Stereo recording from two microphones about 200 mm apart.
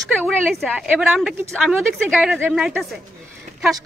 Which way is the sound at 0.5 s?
5° right (ahead or behind).